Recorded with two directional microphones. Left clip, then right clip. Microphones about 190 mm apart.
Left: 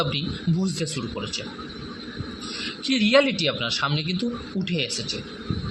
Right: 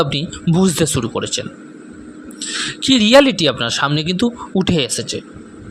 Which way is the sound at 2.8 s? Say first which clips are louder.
Right 9 dB; 50° right (ahead or behind).